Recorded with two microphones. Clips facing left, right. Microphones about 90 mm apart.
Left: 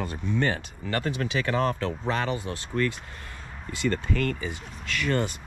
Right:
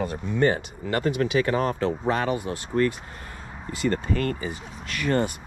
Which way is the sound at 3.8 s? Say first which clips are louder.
Right 2 dB; 40° right (ahead or behind).